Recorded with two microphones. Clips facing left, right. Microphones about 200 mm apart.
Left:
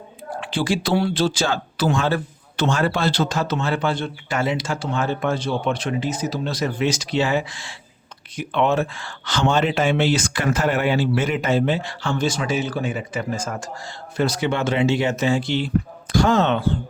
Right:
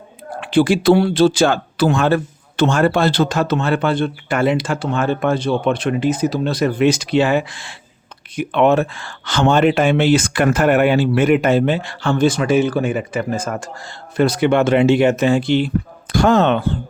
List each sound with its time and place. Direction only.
0.3 s speech: 60° right (ahead or behind)